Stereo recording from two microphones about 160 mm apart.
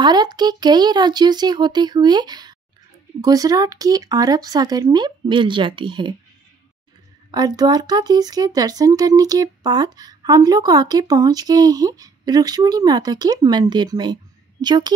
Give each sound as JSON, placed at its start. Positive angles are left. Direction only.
{"t": 0.0, "sound": "speech", "side_deg": -25}
{"t": 7.2, "sound": "speech", "side_deg": -25}